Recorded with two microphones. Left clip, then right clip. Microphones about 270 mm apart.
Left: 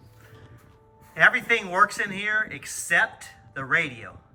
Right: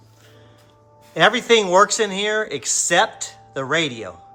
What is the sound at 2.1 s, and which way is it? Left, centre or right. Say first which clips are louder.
Speech: right 4 dB; centre.